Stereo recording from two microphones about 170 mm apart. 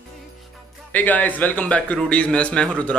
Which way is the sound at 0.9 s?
10° left (ahead or behind).